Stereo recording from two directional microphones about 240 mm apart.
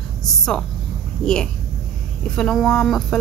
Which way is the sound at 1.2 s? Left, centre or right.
Centre.